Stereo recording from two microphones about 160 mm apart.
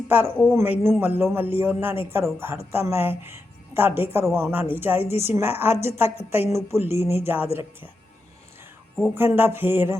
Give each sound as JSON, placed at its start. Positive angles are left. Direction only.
{"t": 0.1, "sound": "speech", "side_deg": -10}
{"t": 7.4, "sound": "speech", "side_deg": 40}
{"t": 9.0, "sound": "speech", "side_deg": -15}